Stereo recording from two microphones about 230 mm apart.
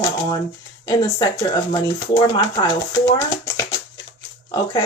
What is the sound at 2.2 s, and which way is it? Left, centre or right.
Speech, centre.